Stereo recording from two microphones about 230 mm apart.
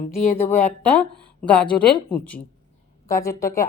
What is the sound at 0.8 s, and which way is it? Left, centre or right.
A woman's voice, centre.